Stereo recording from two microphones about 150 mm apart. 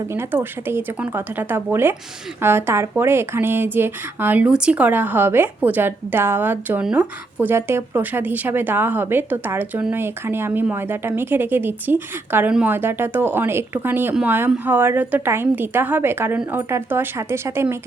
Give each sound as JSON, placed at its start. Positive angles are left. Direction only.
{"t": 0.1, "sound": "speech", "side_deg": -15}